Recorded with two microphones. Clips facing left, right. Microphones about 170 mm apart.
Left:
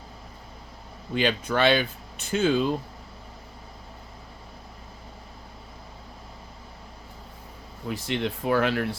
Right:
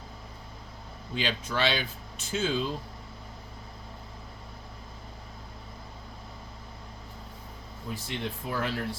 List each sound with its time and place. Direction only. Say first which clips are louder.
1.1 s speech: left 7 dB; 55° left (ahead or behind)
7.9 s speech: left 7 dB; 75° left (ahead or behind)